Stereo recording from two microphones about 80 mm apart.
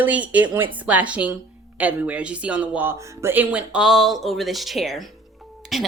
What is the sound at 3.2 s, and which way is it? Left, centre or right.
Speech, right.